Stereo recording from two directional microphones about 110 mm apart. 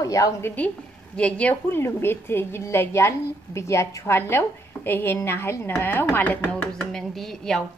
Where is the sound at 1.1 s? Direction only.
10° left (ahead or behind).